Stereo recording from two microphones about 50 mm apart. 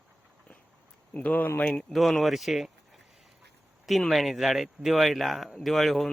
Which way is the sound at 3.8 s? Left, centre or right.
Centre.